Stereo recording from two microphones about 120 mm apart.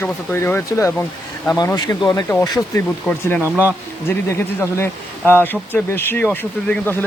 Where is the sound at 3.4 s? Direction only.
15° right (ahead or behind).